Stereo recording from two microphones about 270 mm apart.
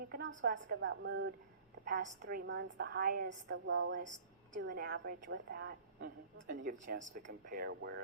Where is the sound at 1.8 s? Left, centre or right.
Right.